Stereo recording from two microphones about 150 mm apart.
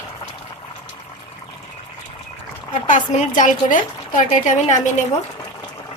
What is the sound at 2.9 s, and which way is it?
Speech, 60° left (ahead or behind).